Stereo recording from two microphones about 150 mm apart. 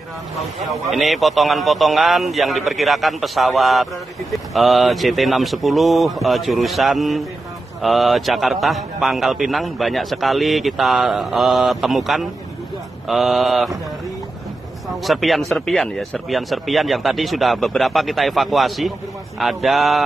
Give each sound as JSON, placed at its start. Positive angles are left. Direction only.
{"t": 0.8, "sound": "a man's voice", "side_deg": 0}
{"t": 15.0, "sound": "a man's voice", "side_deg": 0}